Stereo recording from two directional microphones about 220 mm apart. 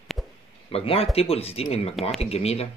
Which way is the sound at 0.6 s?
25° left (ahead or behind).